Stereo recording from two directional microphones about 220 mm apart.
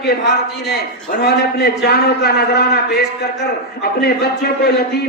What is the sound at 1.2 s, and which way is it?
A man's voice, 45° left (ahead or behind).